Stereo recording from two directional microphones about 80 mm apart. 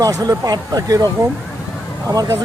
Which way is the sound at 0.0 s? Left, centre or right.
Right.